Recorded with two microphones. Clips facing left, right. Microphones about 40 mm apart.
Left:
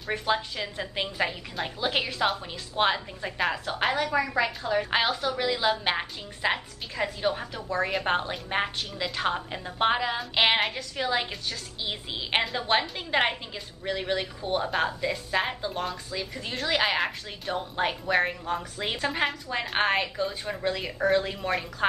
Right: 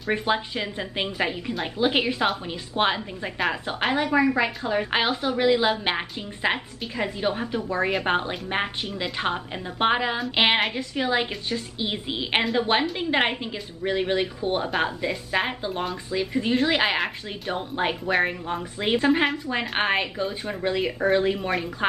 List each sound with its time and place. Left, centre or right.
0.1 s speech: right
1.1 s a woman's voice: centre; by 19.6 s right
19.6 s a woman's voice: centre
19.9 s a woman's voice: centre